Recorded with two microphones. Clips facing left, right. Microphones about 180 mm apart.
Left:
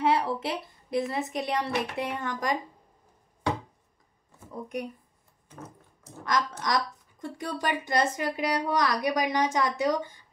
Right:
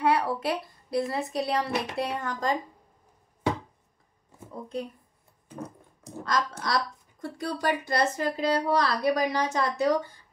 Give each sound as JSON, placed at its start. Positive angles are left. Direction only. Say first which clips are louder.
{"t": 0.0, "sound": "a woman's voice", "louder": "right 1 dB", "side_deg": 25}
{"t": 6.2, "sound": "a woman's voice", "louder": "left 1 dB", "side_deg": 20}